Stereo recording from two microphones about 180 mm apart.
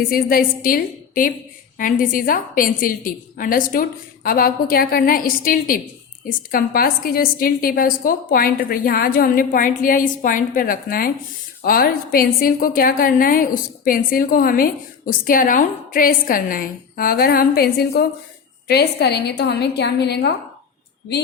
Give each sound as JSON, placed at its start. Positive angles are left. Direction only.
{"t": 0.1, "sound": "a woman's voice", "side_deg": 55}